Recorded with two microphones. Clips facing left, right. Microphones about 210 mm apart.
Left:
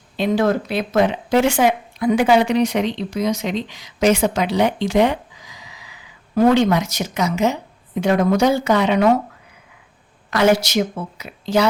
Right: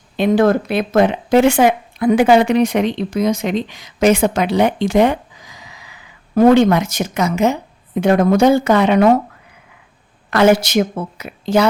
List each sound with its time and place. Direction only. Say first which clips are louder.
0.2 s speech: right 4 dB; 55° right (ahead or behind)
10.2 s speech: right 4 dB; 55° right (ahead or behind)